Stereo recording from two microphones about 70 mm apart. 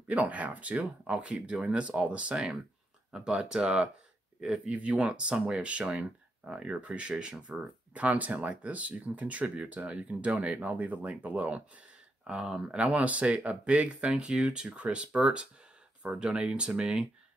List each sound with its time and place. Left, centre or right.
0.1 s speech: right